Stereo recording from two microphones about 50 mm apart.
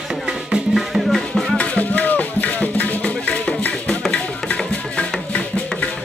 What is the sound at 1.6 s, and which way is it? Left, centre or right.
Music, left.